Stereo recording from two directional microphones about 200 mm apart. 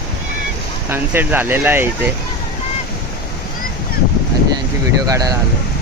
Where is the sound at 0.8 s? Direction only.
10° right (ahead or behind).